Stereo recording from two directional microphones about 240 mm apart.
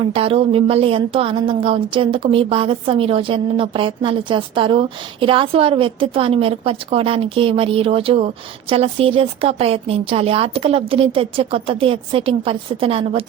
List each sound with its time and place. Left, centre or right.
0.0 s a woman's voice: right